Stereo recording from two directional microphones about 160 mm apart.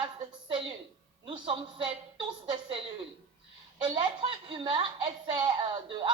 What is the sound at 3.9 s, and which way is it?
A woman's voice, 30° right (ahead or behind).